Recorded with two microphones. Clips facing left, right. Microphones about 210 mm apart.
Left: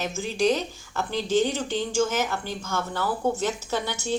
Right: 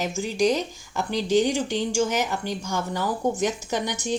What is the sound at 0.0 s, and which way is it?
Speech, 10° right (ahead or behind).